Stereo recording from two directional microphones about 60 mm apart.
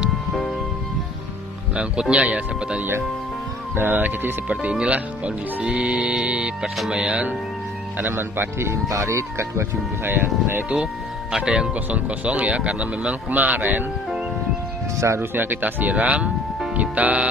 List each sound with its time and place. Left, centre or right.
1.8 s speech: centre
8.0 s speech: right
8.8 s speech: right
11.3 s speech: centre; by 13.8 s right
15.0 s speech: right
15.3 s speech: right